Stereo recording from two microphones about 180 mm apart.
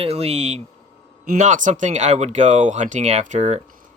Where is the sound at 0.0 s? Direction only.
35° right (ahead or behind).